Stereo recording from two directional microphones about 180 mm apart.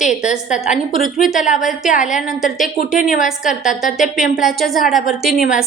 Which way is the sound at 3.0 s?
45° left (ahead or behind).